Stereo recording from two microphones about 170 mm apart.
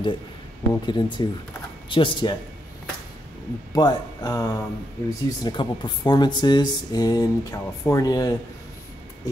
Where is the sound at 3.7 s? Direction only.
25° left (ahead or behind).